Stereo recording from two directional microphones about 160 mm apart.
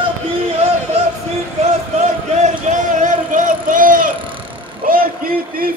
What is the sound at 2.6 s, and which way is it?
Vehicle, 50° right (ahead or behind).